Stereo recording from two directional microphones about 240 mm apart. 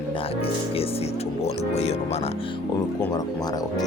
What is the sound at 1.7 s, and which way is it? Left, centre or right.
Speech, left.